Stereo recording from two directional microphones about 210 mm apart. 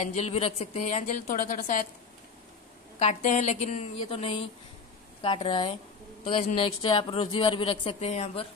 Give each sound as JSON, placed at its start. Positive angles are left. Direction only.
{"t": 0.0, "sound": "a woman's voice", "side_deg": 35}
{"t": 3.0, "sound": "a woman's voice", "side_deg": 30}